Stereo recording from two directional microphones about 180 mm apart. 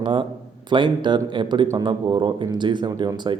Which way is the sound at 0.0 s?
25° right (ahead or behind).